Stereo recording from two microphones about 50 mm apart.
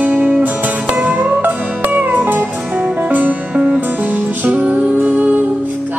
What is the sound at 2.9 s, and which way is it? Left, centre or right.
Music, right.